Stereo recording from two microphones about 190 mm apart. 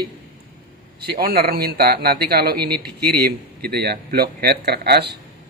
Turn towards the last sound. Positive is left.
turn(degrees=-60)  # may be behind; listen again after turning